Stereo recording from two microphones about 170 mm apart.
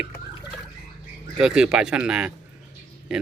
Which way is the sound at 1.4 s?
5° right (ahead or behind).